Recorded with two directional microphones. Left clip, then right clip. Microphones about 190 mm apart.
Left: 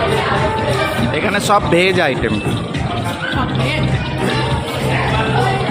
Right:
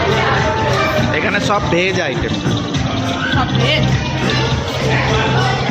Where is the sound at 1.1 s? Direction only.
20° left (ahead or behind).